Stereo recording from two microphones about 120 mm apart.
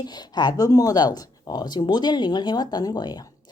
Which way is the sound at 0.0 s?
35° left (ahead or behind).